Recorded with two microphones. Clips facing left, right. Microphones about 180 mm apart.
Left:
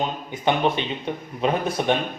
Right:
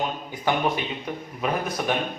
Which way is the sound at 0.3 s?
25° left (ahead or behind).